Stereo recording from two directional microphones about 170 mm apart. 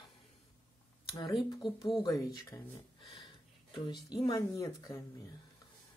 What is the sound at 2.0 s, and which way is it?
Speech, 15° left (ahead or behind).